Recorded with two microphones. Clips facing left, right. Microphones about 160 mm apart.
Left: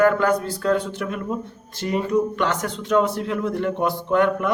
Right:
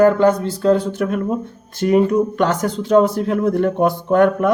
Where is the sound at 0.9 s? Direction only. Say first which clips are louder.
Right 7 dB; 45° right (ahead or behind).